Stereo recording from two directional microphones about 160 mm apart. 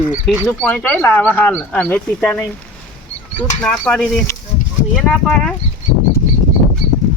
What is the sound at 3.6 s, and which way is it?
Speech, 5° left (ahead or behind).